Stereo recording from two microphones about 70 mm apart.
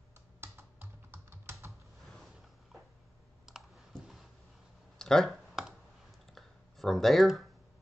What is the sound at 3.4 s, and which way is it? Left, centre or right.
Clicking, centre.